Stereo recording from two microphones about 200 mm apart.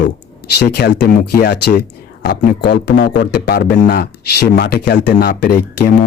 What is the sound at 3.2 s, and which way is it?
Speech, 55° left (ahead or behind).